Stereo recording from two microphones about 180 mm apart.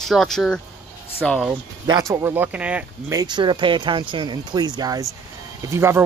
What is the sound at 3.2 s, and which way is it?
Speech, 25° right (ahead or behind).